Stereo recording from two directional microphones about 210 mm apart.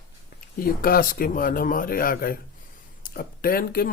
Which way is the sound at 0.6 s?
45° left (ahead or behind).